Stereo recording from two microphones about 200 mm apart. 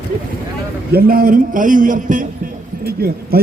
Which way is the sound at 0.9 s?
50° right (ahead or behind).